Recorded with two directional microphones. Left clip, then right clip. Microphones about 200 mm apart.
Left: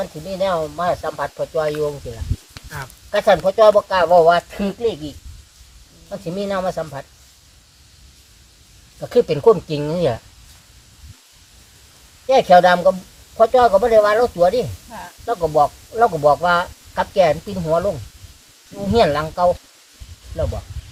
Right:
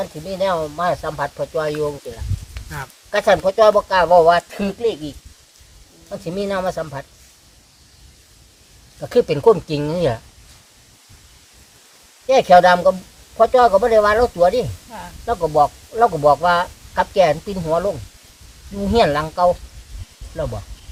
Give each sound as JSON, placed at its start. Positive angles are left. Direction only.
{"t": 0.0, "sound": "speech", "side_deg": 0}
{"t": 2.6, "sound": "speech", "side_deg": -45}
{"t": 3.1, "sound": "speech", "side_deg": 0}
{"t": 9.0, "sound": "speech", "side_deg": 0}
{"t": 12.3, "sound": "speech", "side_deg": 0}